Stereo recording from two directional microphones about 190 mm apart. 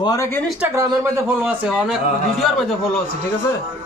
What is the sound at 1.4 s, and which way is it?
Speech, 5° right (ahead or behind).